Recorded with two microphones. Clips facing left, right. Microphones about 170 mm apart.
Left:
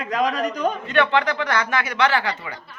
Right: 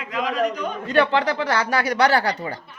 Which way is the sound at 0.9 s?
35° right (ahead or behind).